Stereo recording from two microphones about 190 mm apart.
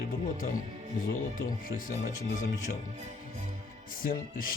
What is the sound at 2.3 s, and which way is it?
Speech, 45° left (ahead or behind).